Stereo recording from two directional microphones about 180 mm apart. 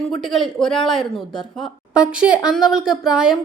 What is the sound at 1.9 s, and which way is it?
A woman's voice, 5° right (ahead or behind).